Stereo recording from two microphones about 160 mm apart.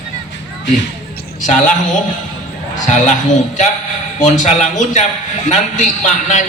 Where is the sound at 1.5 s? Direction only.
50° left (ahead or behind).